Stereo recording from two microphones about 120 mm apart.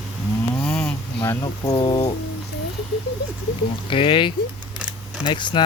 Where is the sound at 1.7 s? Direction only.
45° left (ahead or behind).